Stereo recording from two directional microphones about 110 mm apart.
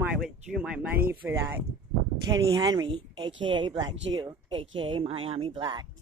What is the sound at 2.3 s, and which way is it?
A woman's voice, 40° right (ahead or behind).